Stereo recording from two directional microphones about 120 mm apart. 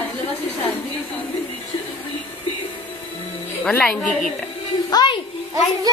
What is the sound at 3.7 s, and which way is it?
Speech, 10° left (ahead or behind).